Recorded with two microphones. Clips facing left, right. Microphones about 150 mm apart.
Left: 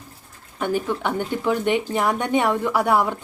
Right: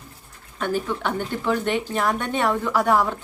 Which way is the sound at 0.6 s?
15° left (ahead or behind).